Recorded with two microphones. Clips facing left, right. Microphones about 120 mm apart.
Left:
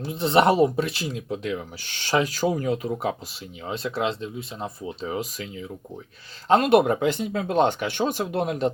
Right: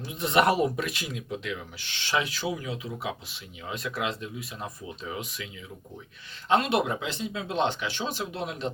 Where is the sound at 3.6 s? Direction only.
30° left (ahead or behind).